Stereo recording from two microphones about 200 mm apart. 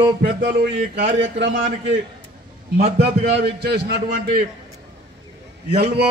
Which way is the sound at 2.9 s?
50° right (ahead or behind).